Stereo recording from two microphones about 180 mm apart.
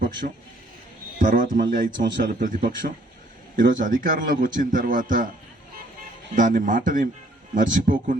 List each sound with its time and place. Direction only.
0.2 s a man's voice: 50° right (ahead or behind)
6.3 s a man's voice: 45° right (ahead or behind)